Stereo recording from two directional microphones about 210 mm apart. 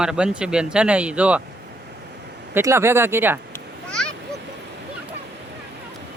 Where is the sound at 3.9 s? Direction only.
5° left (ahead or behind).